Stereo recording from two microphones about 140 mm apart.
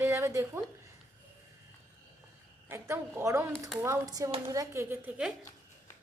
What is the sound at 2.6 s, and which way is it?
A woman's voice, 20° right (ahead or behind).